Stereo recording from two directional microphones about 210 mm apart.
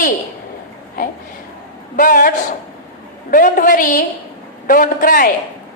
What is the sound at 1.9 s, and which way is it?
Speech, 40° left (ahead or behind).